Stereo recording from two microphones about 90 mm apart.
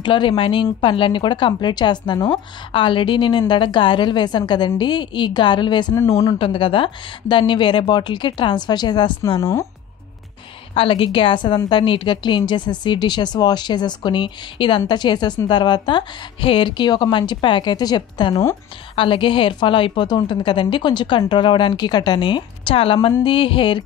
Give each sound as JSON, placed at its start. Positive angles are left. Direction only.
{"t": 0.0, "sound": "a woman's voice", "side_deg": 65}
{"t": 2.7, "sound": "a woman's voice", "side_deg": 70}
{"t": 6.3, "sound": "a woman's voice", "side_deg": 80}
{"t": 9.4, "sound": "speech", "side_deg": 35}
{"t": 10.7, "sound": "a woman's voice", "side_deg": 80}
{"t": 18.9, "sound": "a woman's voice", "side_deg": 70}